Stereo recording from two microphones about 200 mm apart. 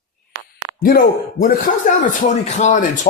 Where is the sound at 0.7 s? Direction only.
45° left (ahead or behind).